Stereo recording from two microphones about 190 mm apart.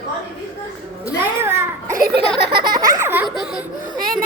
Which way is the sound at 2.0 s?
60° right (ahead or behind).